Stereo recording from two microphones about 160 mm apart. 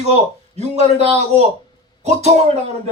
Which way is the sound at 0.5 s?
45° right (ahead or behind).